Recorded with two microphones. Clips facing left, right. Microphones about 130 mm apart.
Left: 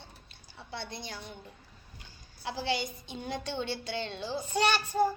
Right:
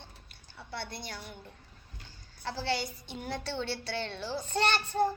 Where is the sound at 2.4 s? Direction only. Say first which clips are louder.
Even; 15° left (ahead or behind).